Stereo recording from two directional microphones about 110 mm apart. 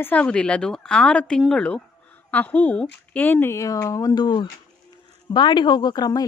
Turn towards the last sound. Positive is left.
turn(degrees=40)  # may be behind; listen again after turning